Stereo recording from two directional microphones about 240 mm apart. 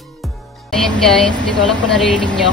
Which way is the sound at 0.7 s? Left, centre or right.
Centre.